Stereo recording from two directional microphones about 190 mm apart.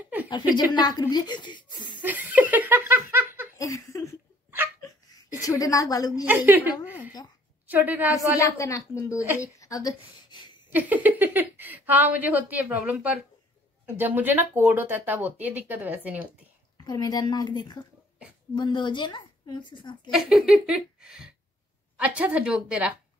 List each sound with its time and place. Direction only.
0.3 s speech: 25° left (ahead or behind)
2.0 s laughter: 10° right (ahead or behind)
3.5 s laughter: 15° left (ahead or behind)
4.8 s a sound: 20° left (ahead or behind)
6.2 s a woman's voice: 10° right (ahead or behind)
8.4 s a woman's voice: 15° left (ahead or behind)
9.4 s a sound: 20° left (ahead or behind)
10.7 s speech: 10° right (ahead or behind)
16.7 s speech: 20° left (ahead or behind)
20.1 s speech: centre (ahead or behind)